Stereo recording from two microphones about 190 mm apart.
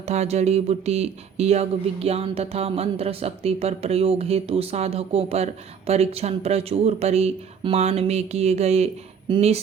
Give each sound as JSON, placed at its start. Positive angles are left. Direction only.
{"t": 0.0, "sound": "speech", "side_deg": -35}